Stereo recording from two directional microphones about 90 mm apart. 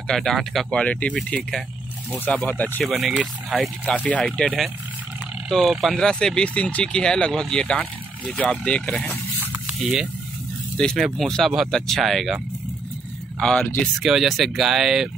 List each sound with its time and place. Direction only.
0.1 s speech: 5° left (ahead or behind)
0.7 s speech: 15° left (ahead or behind)
2.8 s speech: centre (ahead or behind)
3.8 s speech: 15° left (ahead or behind)
5.5 s speech: centre (ahead or behind); by 9.2 s 15° left (ahead or behind)
10.8 s speech: 10° left (ahead or behind)
13.4 s speech: 10° left (ahead or behind)
14.0 s speech: 5° right (ahead or behind)